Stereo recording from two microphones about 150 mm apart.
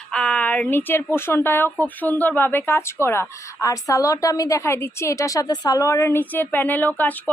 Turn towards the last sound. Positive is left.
turn(degrees=10)  # may be behind; listen again after turning